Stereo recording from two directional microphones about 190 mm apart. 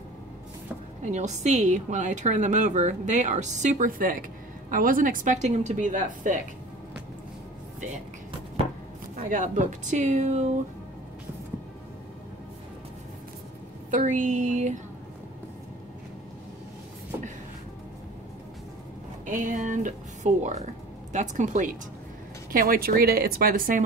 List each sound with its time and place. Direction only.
1.0 s a woman's voice: 40° right (ahead or behind)
9.3 s a woman's voice: 45° right (ahead or behind)
13.8 s a woman's voice: 40° right (ahead or behind)
19.2 s a woman's voice: 45° right (ahead or behind)